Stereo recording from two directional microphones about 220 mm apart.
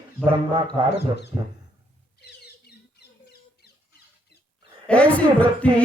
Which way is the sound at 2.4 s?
45° left (ahead or behind).